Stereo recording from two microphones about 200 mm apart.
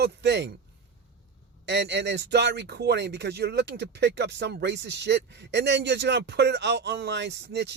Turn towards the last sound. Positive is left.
turn(degrees=-60)  # may be behind; listen again after turning